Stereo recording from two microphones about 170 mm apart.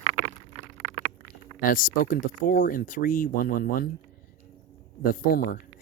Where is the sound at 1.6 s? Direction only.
55° left (ahead or behind).